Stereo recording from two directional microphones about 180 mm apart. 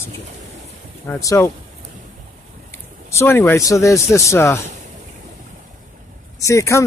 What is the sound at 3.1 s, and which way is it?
Speech, 15° left (ahead or behind).